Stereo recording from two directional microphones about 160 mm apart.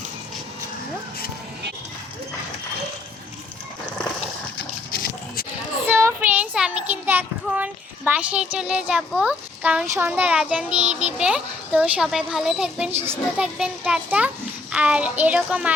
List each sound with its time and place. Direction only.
5.9 s a sound: 15° right (ahead or behind)
8.5 s speech: 5° right (ahead or behind)
10.1 s a child's voice: 5° right (ahead or behind)